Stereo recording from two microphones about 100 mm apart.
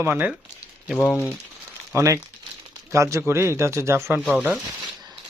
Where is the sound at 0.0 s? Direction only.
15° right (ahead or behind).